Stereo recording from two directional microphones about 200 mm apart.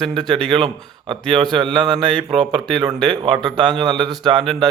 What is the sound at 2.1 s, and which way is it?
Speech, 5° left (ahead or behind).